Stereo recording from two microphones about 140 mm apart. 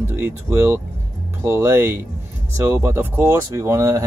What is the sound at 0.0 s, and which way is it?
Speech, 15° right (ahead or behind).